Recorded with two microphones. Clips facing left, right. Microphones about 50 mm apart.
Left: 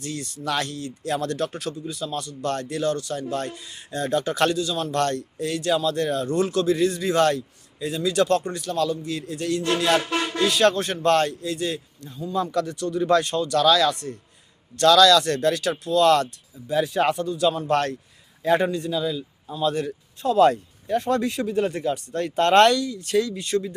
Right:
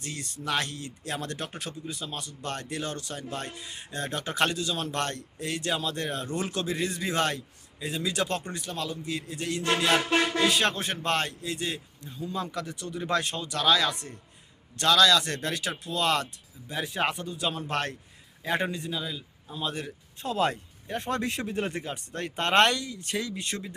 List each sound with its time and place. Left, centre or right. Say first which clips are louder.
0.0 s speech: left 5 dB; right
9.8 s speech: right 1 dB; centre
20.2 s speech: left 10 dB; right